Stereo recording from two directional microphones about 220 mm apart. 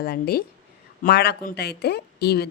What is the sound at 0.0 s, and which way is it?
A woman's voice, 45° left (ahead or behind).